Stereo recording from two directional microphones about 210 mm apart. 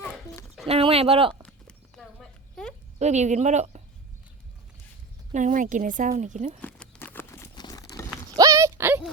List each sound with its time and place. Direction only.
0.0 s a sound: 10° left (ahead or behind)
0.7 s speech: 25° right (ahead or behind)
1.4 s clip-clop: 5° left (ahead or behind)
3.0 s speech: 35° right (ahead or behind)
5.3 s speech: 35° right (ahead or behind)
6.6 s crumpling: 5° left (ahead or behind)
8.4 s a sound: 15° right (ahead or behind)